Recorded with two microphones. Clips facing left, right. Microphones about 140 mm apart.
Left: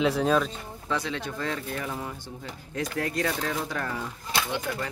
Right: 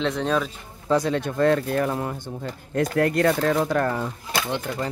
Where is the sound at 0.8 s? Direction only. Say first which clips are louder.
Right 9 dB; 45° right (ahead or behind).